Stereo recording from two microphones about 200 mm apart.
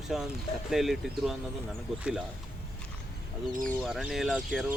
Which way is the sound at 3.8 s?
5° right (ahead or behind).